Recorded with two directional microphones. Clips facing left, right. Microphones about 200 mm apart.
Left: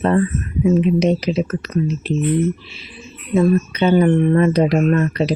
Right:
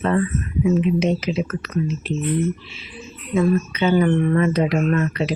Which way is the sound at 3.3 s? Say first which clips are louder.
Left 3 dB; 35° left (ahead or behind).